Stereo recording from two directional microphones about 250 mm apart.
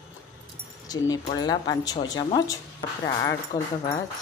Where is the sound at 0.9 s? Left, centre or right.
Centre.